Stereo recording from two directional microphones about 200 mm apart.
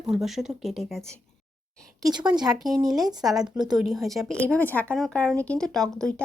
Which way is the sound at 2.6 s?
Centre (ahead or behind).